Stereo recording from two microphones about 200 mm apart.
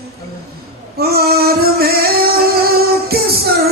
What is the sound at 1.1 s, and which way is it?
Music, 50° right (ahead or behind).